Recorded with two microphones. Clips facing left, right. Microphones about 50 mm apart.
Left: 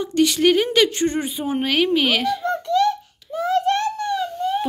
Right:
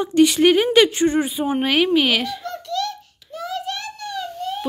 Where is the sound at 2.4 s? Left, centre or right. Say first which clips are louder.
Left 7 dB; left.